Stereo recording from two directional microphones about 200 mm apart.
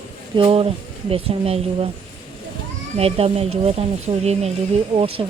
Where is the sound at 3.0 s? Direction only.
30° right (ahead or behind).